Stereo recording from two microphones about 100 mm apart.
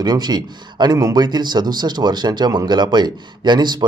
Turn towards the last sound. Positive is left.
turn(degrees=-45)  # may be behind; listen again after turning